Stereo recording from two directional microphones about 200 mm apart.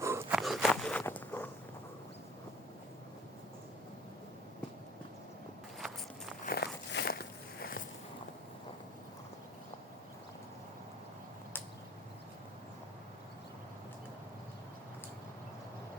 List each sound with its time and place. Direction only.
0.0 s a sound: 15° right (ahead or behind)
0.3 s walk: centre (ahead or behind)
6.4 s biting: 50° left (ahead or behind)